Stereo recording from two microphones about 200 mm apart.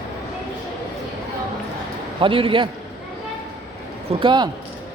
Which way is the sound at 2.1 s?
25° right (ahead or behind).